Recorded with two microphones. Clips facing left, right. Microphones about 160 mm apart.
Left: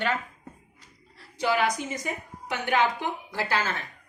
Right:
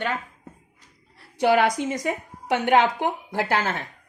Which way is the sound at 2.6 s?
65° right (ahead or behind).